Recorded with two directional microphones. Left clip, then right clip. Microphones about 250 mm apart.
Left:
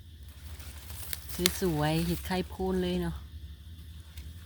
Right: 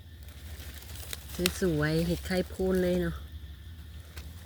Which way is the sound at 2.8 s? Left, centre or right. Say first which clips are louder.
Right 4 dB; left.